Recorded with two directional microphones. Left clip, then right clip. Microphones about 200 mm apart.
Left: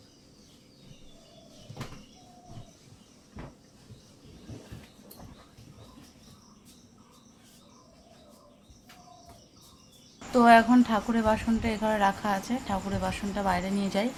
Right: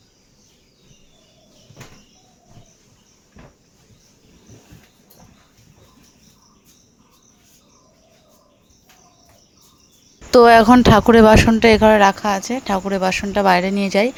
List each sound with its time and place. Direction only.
10.3 s speech: 55° right (ahead or behind)